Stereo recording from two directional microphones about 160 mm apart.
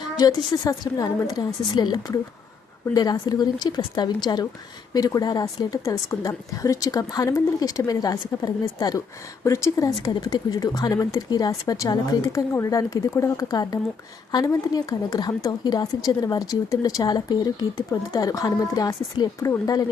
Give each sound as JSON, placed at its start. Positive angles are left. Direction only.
{"t": 0.2, "sound": "a woman's voice", "side_deg": 25}